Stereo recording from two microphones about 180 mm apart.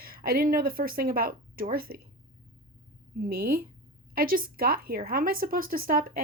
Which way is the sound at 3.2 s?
55° right (ahead or behind).